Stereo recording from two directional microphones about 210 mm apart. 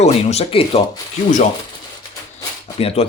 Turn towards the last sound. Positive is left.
turn(degrees=30)  # may be behind; listen again after turning